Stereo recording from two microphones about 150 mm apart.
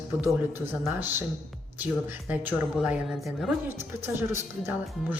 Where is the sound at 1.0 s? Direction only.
15° right (ahead or behind).